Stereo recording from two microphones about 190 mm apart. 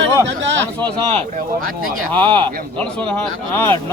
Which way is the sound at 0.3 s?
70° right (ahead or behind).